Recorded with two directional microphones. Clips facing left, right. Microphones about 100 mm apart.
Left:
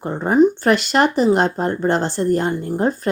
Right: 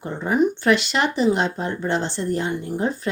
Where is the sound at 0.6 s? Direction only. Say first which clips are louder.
Left 4 dB; 45° left (ahead or behind).